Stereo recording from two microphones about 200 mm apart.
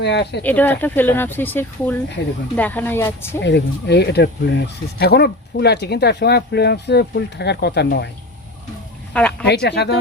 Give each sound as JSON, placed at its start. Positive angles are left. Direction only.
{"t": 0.0, "sound": "speech", "side_deg": 60}
{"t": 0.4, "sound": "speech", "side_deg": 10}
{"t": 3.4, "sound": "speech", "side_deg": 60}
{"t": 9.1, "sound": "speech", "side_deg": 5}
{"t": 9.5, "sound": "speech", "side_deg": 55}